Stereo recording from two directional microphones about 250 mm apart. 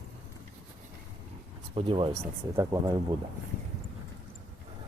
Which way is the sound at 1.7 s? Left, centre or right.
Right.